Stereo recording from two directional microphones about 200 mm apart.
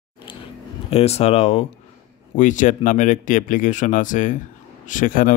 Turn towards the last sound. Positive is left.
turn(degrees=45)  # may be behind; listen again after turning